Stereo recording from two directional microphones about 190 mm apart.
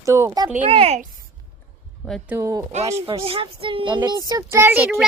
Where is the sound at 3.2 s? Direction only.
30° right (ahead or behind).